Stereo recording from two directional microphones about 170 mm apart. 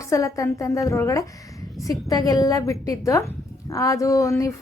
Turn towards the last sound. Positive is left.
turn(degrees=20)  # may be behind; listen again after turning